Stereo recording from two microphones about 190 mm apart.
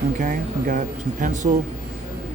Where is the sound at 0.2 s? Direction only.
45° right (ahead or behind).